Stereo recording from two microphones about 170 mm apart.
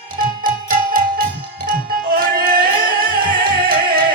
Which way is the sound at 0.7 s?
55° right (ahead or behind).